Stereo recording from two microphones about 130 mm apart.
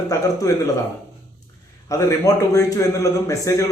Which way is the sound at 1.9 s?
25° left (ahead or behind).